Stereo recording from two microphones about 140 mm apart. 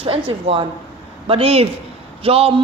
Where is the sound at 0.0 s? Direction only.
40° right (ahead or behind).